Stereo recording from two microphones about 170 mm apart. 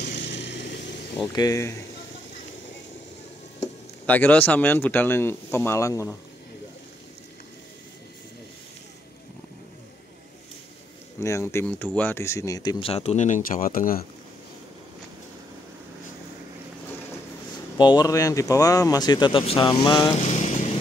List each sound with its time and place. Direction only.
0.0 s vehicle: 90° left
1.3 s speech: 20° left (ahead or behind)
4.0 s speech: 10° left (ahead or behind)
11.1 s speech: 15° left (ahead or behind); by 14.0 s 55° left (ahead or behind)
17.7 s speech: 25° left (ahead or behind)
20.2 s vehicle: 45° left (ahead or behind)